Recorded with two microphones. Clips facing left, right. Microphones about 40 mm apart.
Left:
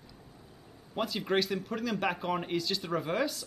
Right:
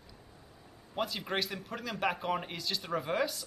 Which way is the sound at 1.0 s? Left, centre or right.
Centre.